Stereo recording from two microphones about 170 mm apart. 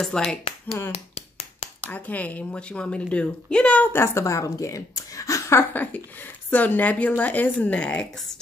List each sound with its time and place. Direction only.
0.0 s speech: 5° left (ahead or behind)
0.9 s a sound: 35° left (ahead or behind)
1.9 s a woman's voice: 10° left (ahead or behind)